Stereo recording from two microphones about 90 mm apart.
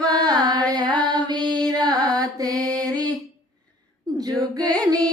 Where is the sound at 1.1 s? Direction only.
55° right (ahead or behind).